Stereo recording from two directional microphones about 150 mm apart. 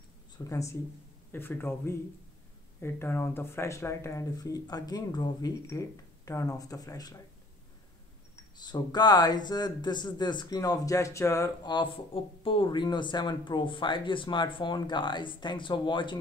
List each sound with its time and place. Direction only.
0.4 s speech: 20° left (ahead or behind)
8.5 s speech: 30° left (ahead or behind)